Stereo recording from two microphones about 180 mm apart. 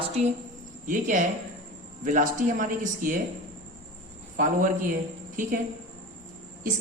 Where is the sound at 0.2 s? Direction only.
40° right (ahead or behind).